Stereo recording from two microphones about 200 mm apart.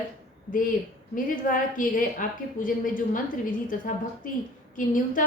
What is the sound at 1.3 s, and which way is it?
A woman's voice, 40° left (ahead or behind).